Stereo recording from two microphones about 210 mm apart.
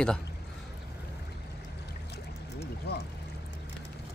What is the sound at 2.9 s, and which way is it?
Pour, 50° left (ahead or behind).